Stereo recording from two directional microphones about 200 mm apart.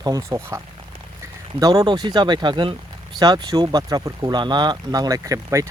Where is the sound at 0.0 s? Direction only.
15° right (ahead or behind).